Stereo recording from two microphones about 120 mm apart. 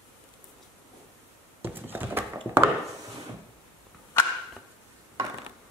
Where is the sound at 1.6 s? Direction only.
15° right (ahead or behind).